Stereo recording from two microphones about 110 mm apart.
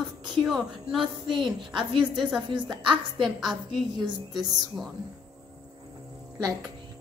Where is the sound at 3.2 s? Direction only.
5° right (ahead or behind).